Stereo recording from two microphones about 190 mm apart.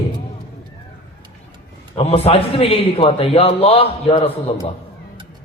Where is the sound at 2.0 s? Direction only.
30° left (ahead or behind).